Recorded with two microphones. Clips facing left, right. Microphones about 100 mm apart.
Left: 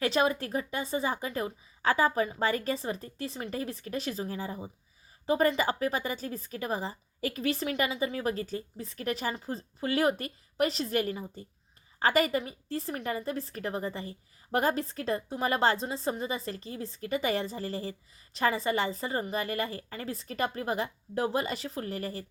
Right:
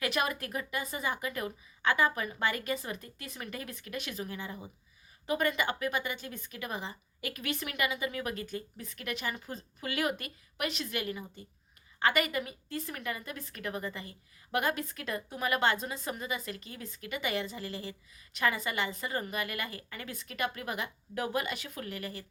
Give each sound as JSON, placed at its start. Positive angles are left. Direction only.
{"t": 0.0, "sound": "a woman's voice", "side_deg": 30}